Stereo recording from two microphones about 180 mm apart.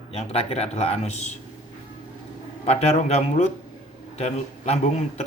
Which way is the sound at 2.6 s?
35° left (ahead or behind).